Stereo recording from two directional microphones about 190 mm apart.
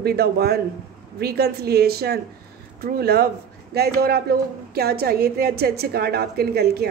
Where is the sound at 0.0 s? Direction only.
55° right (ahead or behind).